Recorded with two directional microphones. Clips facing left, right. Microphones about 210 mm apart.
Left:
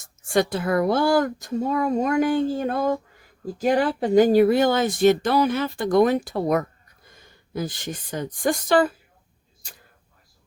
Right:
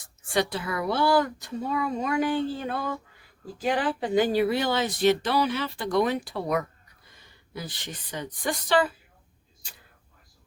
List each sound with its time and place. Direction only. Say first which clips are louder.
0.0 s speech: left 5 dB; 45° left (ahead or behind)